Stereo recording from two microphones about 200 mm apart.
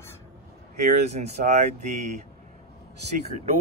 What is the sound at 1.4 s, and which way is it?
Speech, 45° right (ahead or behind).